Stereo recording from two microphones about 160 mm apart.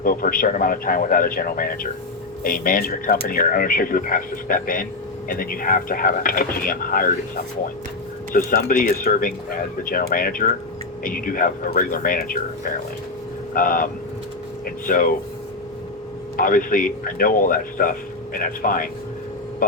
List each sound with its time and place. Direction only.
0.0 s speech: 60° left (ahead or behind)
14.8 s speech: 60° left (ahead or behind)
16.4 s speech: 60° left (ahead or behind)